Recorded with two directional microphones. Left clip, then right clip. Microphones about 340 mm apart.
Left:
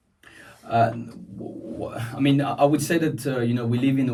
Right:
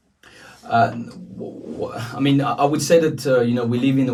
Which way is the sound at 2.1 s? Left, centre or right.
Centre.